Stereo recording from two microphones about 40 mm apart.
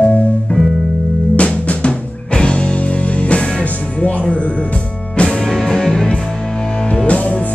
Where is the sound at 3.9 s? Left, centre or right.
Left.